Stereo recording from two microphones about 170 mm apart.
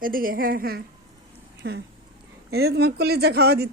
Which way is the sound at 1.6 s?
90° right.